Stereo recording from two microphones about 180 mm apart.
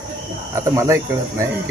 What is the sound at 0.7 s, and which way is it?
Speech, 15° right (ahead or behind).